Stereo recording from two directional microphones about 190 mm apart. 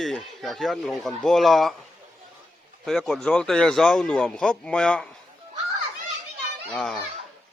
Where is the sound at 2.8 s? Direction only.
Centre (ahead or behind).